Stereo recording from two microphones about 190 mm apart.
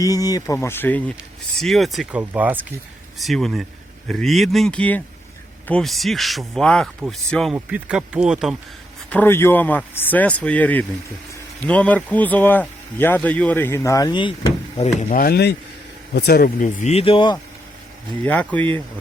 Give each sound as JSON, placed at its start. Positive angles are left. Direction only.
{"t": 0.0, "sound": "speech", "side_deg": 20}
{"t": 9.0, "sound": "speech", "side_deg": 10}
{"t": 15.2, "sound": "speech", "side_deg": 60}
{"t": 16.6, "sound": "speech", "side_deg": 35}
{"t": 18.2, "sound": "speech", "side_deg": 10}